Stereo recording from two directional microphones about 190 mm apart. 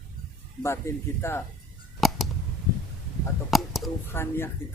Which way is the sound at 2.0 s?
Centre (ahead or behind).